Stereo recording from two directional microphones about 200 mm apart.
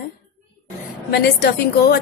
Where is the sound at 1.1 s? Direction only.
55° left (ahead or behind).